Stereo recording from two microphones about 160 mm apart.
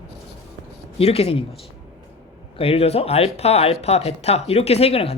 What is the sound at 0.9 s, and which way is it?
Speech, 40° left (ahead or behind).